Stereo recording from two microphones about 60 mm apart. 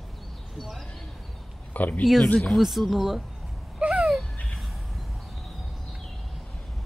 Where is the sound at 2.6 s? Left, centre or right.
Centre.